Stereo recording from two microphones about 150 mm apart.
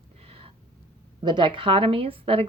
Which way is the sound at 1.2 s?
30° right (ahead or behind).